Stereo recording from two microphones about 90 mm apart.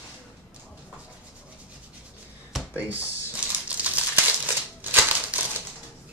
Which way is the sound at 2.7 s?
20° right (ahead or behind).